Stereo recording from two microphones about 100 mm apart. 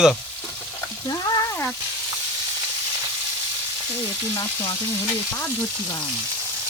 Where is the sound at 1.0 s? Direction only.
40° left (ahead or behind).